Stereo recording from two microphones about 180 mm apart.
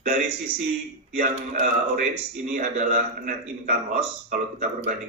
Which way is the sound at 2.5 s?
45° right (ahead or behind).